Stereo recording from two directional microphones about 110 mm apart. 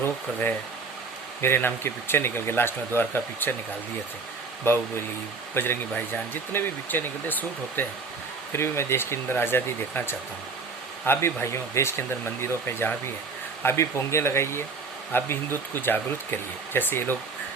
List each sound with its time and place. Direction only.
0.0 s speech: 20° left (ahead or behind)
4.7 s speech: 20° left (ahead or behind)